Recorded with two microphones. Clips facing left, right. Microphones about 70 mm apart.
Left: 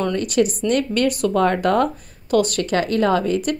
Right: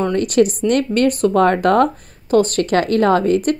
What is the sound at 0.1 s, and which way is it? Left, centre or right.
Speech, right.